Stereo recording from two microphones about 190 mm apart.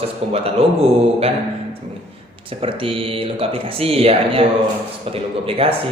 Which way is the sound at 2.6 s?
30° right (ahead or behind).